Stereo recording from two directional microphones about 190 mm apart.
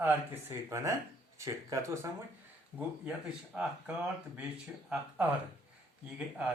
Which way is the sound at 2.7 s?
5° right (ahead or behind).